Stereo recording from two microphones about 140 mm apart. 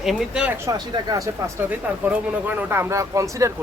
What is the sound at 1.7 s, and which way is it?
Speech, 10° right (ahead or behind).